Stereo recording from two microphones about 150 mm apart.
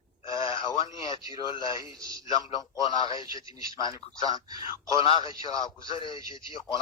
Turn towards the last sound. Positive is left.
turn(degrees=30)  # may be behind; listen again after turning